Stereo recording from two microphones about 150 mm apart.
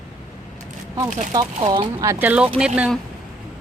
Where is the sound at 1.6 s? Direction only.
30° right (ahead or behind).